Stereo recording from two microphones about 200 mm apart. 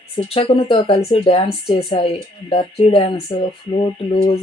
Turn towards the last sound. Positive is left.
turn(degrees=25)  # may be behind; listen again after turning